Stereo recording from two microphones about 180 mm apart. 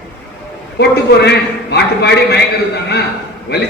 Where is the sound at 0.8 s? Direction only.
65° left (ahead or behind).